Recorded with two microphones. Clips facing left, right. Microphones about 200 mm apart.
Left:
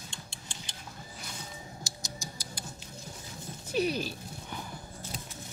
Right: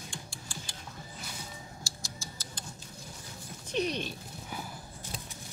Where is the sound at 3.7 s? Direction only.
5° left (ahead or behind).